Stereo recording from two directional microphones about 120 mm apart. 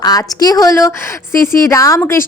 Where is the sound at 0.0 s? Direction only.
30° left (ahead or behind).